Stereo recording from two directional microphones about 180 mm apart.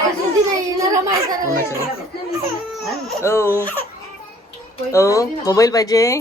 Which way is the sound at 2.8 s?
Centre (ahead or behind).